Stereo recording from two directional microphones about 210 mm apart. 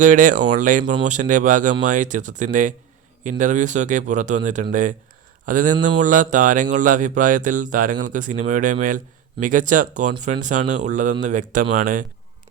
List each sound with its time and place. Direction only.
0.0 s speech: 40° right (ahead or behind)